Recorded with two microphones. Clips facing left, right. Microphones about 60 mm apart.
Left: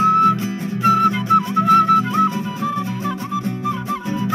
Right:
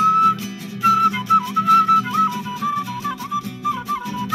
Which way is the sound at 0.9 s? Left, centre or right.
Centre.